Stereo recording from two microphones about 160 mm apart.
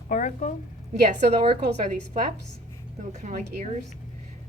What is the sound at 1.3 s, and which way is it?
Speech, 45° right (ahead or behind).